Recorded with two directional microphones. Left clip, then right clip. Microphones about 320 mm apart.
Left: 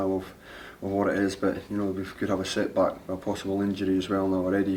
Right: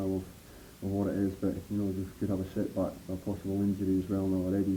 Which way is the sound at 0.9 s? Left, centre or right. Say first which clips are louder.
Left 7 dB; centre.